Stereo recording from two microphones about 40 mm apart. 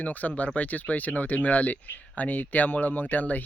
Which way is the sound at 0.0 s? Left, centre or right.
Left.